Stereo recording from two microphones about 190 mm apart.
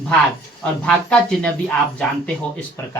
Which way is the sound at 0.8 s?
5° left (ahead or behind).